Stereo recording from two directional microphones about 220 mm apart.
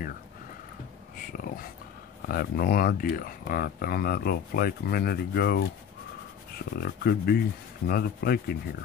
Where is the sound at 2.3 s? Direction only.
45° left (ahead or behind).